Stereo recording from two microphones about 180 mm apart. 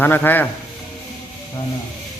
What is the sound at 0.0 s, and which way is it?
Speech, 10° left (ahead or behind).